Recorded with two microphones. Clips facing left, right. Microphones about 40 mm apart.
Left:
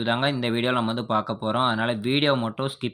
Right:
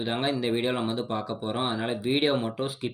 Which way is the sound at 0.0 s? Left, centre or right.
Left.